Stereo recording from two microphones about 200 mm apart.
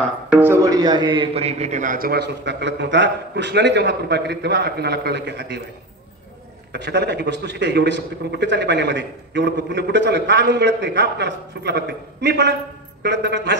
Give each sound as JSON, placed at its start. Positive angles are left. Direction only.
{"t": 0.3, "sound": "a man's voice", "side_deg": -10}
{"t": 6.7, "sound": "a man's voice", "side_deg": -60}